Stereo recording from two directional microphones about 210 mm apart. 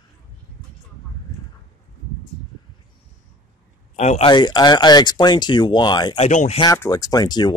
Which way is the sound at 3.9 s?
30° left (ahead or behind).